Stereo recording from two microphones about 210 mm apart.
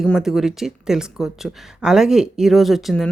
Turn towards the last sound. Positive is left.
turn(degrees=0)  # may be behind; listen again after turning